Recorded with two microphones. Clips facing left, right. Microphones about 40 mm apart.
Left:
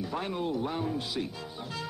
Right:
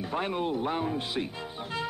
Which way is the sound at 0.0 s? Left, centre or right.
Right.